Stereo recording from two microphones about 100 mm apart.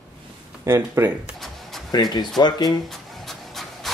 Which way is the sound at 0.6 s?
25° right (ahead or behind).